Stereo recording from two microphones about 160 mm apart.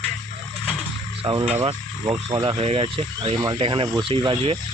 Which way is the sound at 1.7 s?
25° right (ahead or behind).